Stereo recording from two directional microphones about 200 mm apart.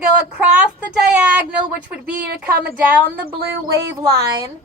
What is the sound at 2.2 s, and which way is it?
Speech, 55° right (ahead or behind).